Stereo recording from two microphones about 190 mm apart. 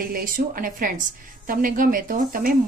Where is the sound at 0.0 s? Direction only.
50° right (ahead or behind).